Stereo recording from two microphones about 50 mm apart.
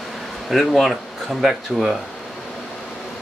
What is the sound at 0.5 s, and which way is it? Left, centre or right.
Speech, centre.